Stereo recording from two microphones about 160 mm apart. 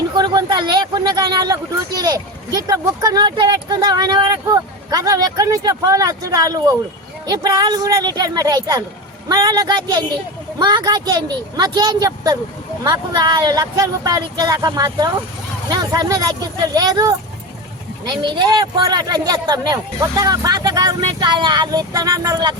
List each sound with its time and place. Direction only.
0.2 s speech: 30° right (ahead or behind)